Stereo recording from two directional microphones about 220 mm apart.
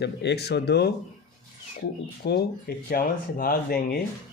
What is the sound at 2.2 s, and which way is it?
Speech, 45° left (ahead or behind).